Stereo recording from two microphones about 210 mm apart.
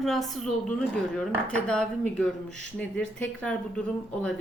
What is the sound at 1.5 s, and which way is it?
A woman's voice, 5° left (ahead or behind).